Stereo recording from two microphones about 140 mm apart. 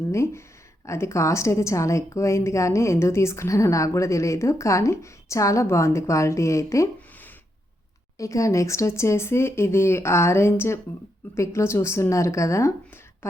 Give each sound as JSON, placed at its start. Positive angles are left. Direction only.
{"t": 0.1, "sound": "a woman's voice", "side_deg": 20}